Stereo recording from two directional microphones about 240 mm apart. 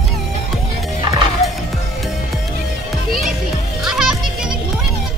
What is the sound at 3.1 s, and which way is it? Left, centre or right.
Music, centre.